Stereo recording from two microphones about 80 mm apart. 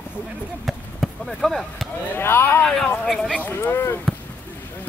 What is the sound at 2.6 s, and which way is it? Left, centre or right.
Speech, centre.